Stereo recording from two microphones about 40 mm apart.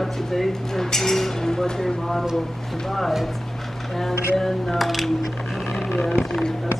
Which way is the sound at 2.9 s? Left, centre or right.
Centre.